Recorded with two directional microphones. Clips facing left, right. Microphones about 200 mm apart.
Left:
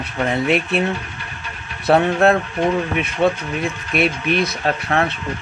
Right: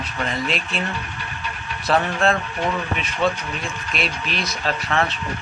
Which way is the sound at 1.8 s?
60° left (ahead or behind).